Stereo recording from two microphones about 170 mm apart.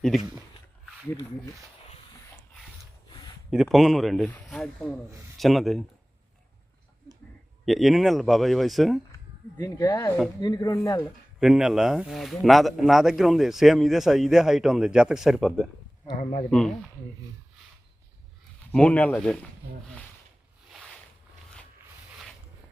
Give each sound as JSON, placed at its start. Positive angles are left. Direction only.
{"t": 3.1, "sound": "a sound", "side_deg": 25}
{"t": 3.5, "sound": "speech", "side_deg": 0}
{"t": 7.6, "sound": "speech", "side_deg": 0}
{"t": 9.6, "sound": "speech", "side_deg": 20}
{"t": 11.3, "sound": "speech", "side_deg": -5}
{"t": 16.0, "sound": "speech", "side_deg": 55}
{"t": 16.5, "sound": "speech", "side_deg": 5}
{"t": 18.7, "sound": "speech", "side_deg": 5}
{"t": 20.7, "sound": "a sound", "side_deg": 0}